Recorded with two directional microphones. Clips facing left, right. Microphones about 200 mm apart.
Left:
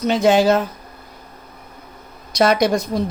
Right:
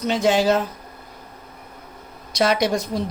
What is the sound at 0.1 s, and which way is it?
Speech, 55° left (ahead or behind).